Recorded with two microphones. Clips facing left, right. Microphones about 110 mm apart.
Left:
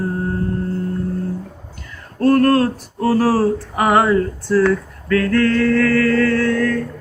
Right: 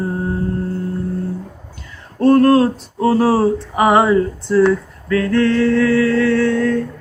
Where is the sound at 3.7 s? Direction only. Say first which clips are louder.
Right 2 dB; 15° right (ahead or behind).